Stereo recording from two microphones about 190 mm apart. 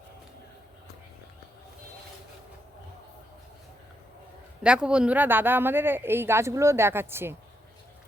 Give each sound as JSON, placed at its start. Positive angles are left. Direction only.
{"t": 4.6, "sound": "speech", "side_deg": -5}